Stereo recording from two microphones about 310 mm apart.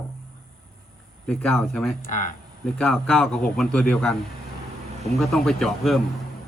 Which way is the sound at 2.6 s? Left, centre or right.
Centre.